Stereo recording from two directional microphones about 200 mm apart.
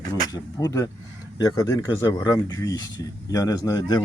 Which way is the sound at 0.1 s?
20° left (ahead or behind).